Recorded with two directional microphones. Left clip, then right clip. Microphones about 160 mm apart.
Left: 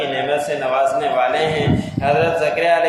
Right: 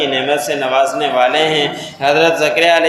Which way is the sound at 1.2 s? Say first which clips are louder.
Right 5 dB; 35° right (ahead or behind).